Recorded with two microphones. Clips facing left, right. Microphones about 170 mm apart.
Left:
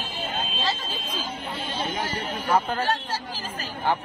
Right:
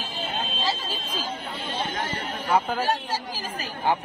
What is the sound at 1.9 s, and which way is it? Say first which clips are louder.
Speech: left 1 dB; centre (ahead or behind).